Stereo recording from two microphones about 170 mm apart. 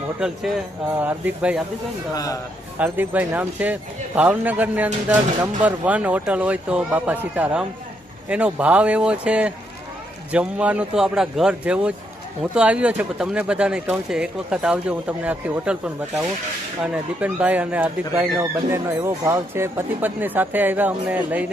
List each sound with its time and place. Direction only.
0.2 s speech: centre (ahead or behind)
2.1 s a man's voice: 20° left (ahead or behind)
2.7 s speech: 10° right (ahead or behind)